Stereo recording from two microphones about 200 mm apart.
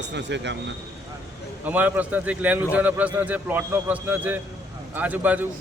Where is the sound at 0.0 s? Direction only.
60° right (ahead or behind).